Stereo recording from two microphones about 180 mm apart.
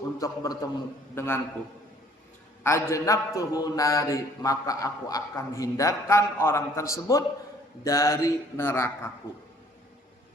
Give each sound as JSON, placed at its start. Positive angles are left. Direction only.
{"t": 0.2, "sound": "a man's voice", "side_deg": 15}
{"t": 2.6, "sound": "a man's voice", "side_deg": 15}